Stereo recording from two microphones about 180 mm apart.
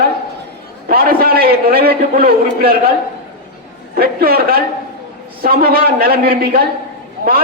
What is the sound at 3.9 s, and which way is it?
A man's voice, 55° right (ahead or behind).